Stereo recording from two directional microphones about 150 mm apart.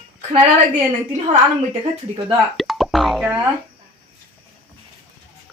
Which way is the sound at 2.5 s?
Centre (ahead or behind).